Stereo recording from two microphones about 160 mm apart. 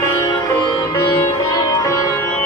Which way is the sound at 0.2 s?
25° left (ahead or behind).